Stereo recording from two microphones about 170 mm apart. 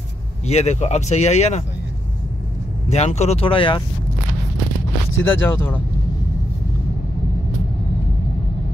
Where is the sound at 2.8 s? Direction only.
40° left (ahead or behind).